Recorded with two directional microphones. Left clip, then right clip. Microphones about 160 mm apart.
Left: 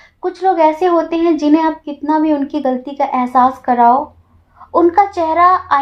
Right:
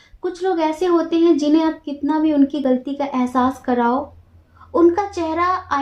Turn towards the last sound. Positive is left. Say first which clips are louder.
# left 9 dB
turn(degrees=35)  # may be behind; listen again after turning